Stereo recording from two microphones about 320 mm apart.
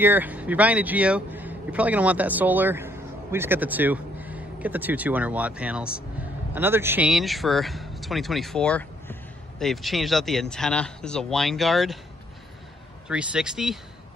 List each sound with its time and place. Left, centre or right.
0.0 s a man's voice: centre
13.1 s speech: centre